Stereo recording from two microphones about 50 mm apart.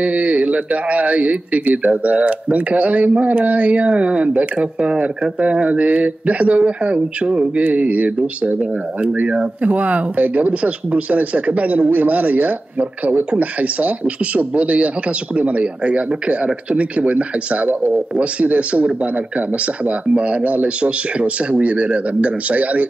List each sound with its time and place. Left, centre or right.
0.0 s speech: right